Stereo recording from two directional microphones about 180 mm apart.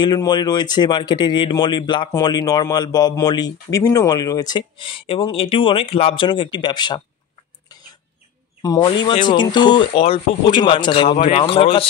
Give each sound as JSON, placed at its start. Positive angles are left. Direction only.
{"t": 0.0, "sound": "a man's voice", "side_deg": 25}
{"t": 8.6, "sound": "a man's voice", "side_deg": 20}